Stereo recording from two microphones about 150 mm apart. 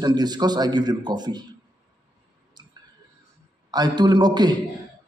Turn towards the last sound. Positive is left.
turn(degrees=-30)  # may be behind; listen again after turning